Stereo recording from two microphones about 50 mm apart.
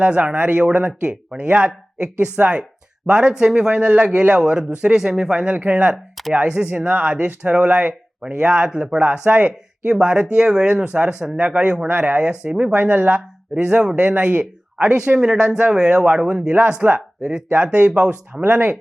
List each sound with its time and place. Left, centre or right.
0.0 s speech: right
3.8 s speech: right
5.5 s speech: right
13.6 s speech: right
14.8 s speech: centre
16.8 s speech: right